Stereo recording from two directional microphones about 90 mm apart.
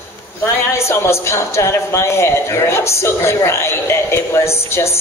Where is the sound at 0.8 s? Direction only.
30° left (ahead or behind).